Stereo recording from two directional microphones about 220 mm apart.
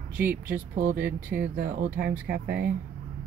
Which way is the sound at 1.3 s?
45° right (ahead or behind).